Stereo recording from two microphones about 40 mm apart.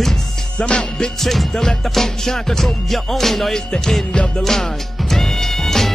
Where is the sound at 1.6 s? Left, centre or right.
Centre.